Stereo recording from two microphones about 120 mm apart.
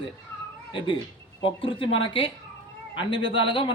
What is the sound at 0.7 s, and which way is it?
Speech, 45° left (ahead or behind).